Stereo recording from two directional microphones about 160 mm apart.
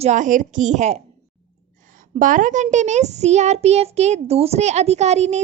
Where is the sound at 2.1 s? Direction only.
55° right (ahead or behind).